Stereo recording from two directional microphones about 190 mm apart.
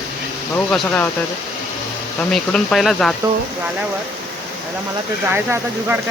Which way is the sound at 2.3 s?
Centre (ahead or behind).